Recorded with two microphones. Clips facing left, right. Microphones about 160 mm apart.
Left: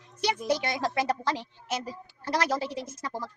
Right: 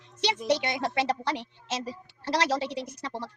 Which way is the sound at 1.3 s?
70° right (ahead or behind).